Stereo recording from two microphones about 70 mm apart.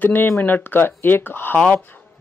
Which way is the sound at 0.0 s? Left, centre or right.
Left.